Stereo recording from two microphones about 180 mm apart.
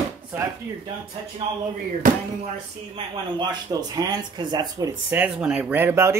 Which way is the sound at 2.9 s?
25° right (ahead or behind).